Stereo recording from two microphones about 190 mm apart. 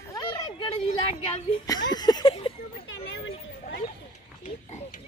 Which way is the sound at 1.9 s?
20° left (ahead or behind).